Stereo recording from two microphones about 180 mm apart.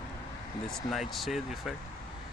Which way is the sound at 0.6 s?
Centre (ahead or behind).